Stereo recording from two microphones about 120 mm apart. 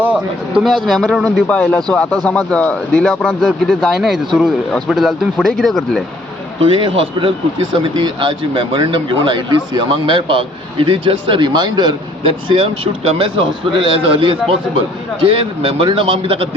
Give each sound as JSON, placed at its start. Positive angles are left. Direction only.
{"t": 0.0, "sound": "a man's voice", "side_deg": -10}
{"t": 0.9, "sound": "speech", "side_deg": 5}
{"t": 6.6, "sound": "a man's voice", "side_deg": -45}